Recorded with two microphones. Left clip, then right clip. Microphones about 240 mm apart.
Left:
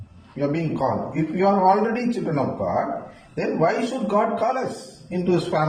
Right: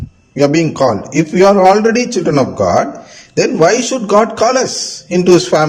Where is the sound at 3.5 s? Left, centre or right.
Right.